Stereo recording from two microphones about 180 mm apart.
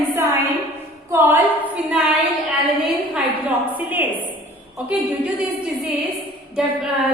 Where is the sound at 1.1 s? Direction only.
10° right (ahead or behind).